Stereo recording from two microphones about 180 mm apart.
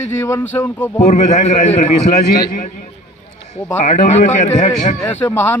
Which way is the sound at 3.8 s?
40° left (ahead or behind).